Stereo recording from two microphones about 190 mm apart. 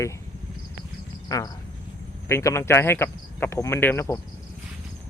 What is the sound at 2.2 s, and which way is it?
Speech, 15° left (ahead or behind).